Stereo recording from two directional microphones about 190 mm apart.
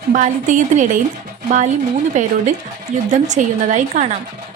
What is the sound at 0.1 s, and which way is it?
Speech, 40° right (ahead or behind).